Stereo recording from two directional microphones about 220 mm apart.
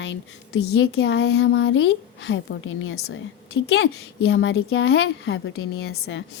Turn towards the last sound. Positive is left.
turn(degrees=55)  # may be behind; listen again after turning